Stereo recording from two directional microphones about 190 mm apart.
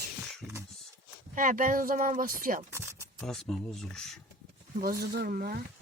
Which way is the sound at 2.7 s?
15° right (ahead or behind).